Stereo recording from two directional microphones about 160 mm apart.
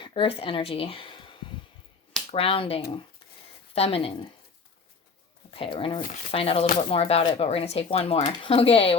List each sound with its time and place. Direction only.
0.0 s speech: 35° left (ahead or behind)
5.5 s speech: 35° left (ahead or behind)